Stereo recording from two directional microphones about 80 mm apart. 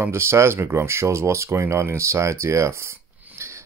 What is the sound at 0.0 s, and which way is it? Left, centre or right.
Speech, right.